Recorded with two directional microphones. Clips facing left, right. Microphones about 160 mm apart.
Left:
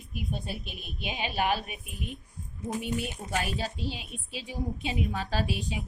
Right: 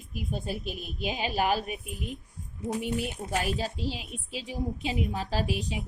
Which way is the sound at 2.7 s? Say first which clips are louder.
Right 2 dB; 70° right (ahead or behind).